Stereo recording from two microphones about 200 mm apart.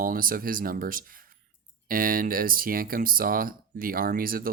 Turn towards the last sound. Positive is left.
turn(degrees=-45)  # may be behind; listen again after turning